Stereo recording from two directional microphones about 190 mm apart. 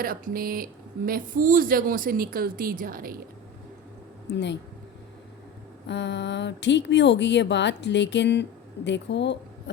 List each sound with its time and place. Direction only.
0.0 s speech: 50° right (ahead or behind)
4.3 s a woman's voice: 65° left (ahead or behind)
5.9 s a woman's voice: 65° left (ahead or behind)